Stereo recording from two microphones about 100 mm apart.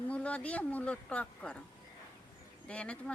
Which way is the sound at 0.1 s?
15° left (ahead or behind).